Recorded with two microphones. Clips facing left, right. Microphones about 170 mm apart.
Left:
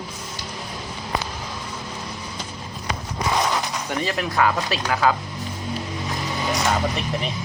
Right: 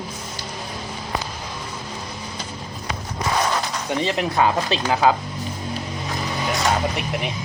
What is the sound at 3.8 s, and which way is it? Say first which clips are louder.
Speech: right 6 dB; 20° right (ahead or behind).